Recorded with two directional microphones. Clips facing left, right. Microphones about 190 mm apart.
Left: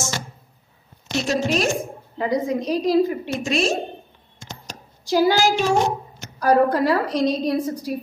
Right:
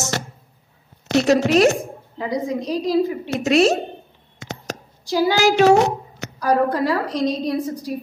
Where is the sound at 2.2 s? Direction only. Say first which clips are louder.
Left 2 dB; 55° left (ahead or behind).